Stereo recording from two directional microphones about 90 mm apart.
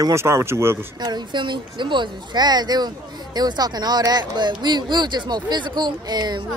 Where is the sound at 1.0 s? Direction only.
55° right (ahead or behind).